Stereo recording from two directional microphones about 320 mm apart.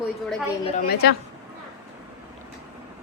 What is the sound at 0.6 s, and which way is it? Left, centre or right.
Speech, left.